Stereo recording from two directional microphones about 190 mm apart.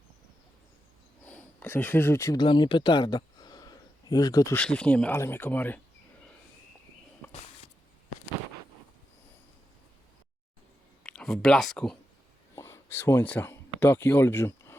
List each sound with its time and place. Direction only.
1.2 s speech: 10° left (ahead or behind)
4.6 s speech: 5° left (ahead or behind)
7.2 s a sound: 10° left (ahead or behind)
11.0 s speech: 5° left (ahead or behind)
12.5 s speech: 15° left (ahead or behind)